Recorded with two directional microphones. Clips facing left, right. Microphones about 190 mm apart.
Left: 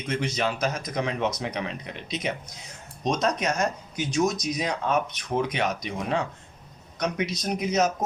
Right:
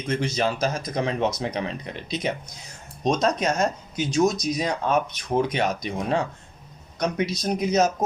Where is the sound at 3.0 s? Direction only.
30° right (ahead or behind).